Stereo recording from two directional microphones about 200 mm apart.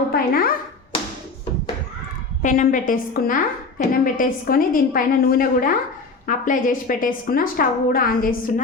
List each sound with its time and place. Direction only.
0.1 s speech: 45° left (ahead or behind)
2.4 s a woman's voice: 40° left (ahead or behind)